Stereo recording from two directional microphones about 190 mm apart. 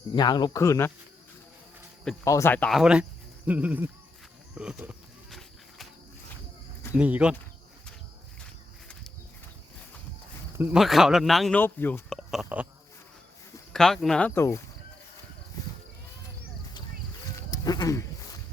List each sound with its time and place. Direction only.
0.1 s speech: 20° left (ahead or behind)
2.2 s speech: 15° left (ahead or behind); by 3.8 s 10° right (ahead or behind)
4.5 s a sound: 5° right (ahead or behind)
6.9 s speech: 5° right (ahead or behind)
10.6 s speech: 5° right (ahead or behind)
13.7 s speech: centre (ahead or behind)
17.5 s a sound: 20° left (ahead or behind)